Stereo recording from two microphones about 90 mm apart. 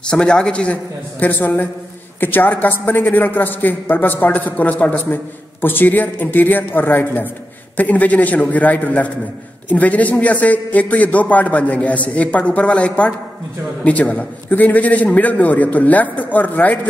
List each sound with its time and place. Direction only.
0.1 s a man's voice: 10° left (ahead or behind)
1.2 s a man's voice: 20° left (ahead or behind)